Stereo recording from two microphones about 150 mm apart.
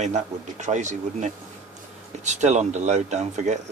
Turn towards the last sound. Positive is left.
turn(degrees=-50)  # may be behind; listen again after turning